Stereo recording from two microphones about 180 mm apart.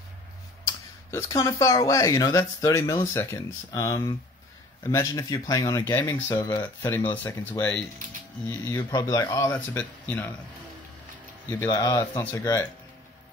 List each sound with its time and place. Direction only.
0.7 s tick-tock: 15° left (ahead or behind)
1.9 s speech: 20° left (ahead or behind)
11.6 s speech: 20° left (ahead or behind)